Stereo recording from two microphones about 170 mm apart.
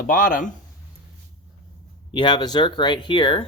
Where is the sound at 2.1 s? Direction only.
25° left (ahead or behind).